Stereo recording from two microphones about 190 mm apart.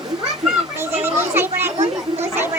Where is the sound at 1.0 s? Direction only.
10° right (ahead or behind).